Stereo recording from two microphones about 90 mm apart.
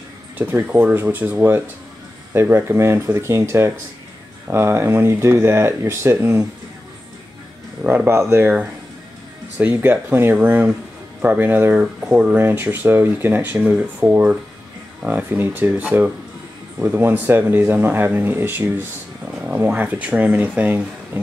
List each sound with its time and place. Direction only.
0.4 s speech: 20° right (ahead or behind)
7.8 s speech: 20° right (ahead or behind)
8.1 s speech: 30° right (ahead or behind)
9.6 s speech: 20° right (ahead or behind)